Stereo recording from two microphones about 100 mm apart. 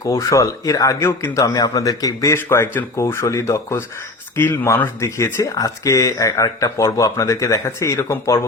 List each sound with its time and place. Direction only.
0.0 s speech: 35° left (ahead or behind)
2.3 s speech: 25° left (ahead or behind)